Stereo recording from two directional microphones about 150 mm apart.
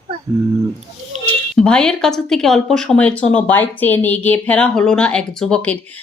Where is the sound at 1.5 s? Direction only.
5° left (ahead or behind).